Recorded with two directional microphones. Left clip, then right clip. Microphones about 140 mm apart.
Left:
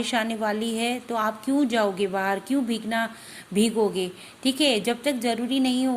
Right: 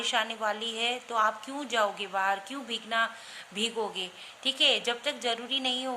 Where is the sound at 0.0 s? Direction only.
25° left (ahead or behind).